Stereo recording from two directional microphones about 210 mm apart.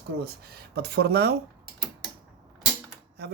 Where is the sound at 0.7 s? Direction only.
50° right (ahead or behind).